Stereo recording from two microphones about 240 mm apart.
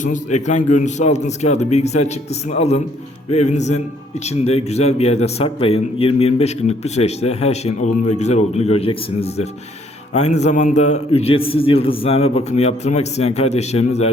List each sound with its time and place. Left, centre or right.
0.0 s speech: left
10.2 s speech: left